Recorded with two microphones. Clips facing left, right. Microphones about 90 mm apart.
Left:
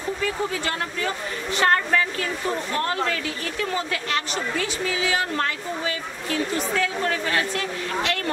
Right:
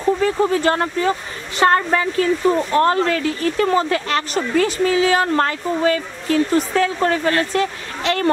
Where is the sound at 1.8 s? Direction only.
30° right (ahead or behind).